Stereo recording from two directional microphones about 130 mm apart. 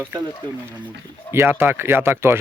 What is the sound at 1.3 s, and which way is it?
Speech, 15° right (ahead or behind).